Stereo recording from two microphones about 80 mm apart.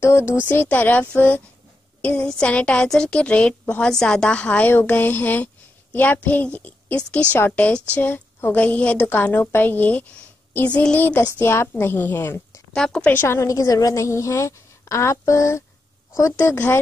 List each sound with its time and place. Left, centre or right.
0.0 s a woman's voice: left
0.5 s a woman's voice: left
11.3 s a woman's voice: left
12.7 s a woman's voice: centre
13.1 s a woman's voice: left